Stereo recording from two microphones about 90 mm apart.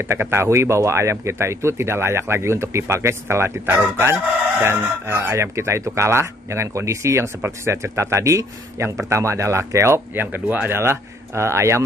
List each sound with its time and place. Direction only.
0.0 s speech: 30° right (ahead or behind)